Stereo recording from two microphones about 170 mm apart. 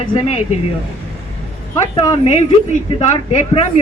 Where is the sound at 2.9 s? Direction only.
30° left (ahead or behind).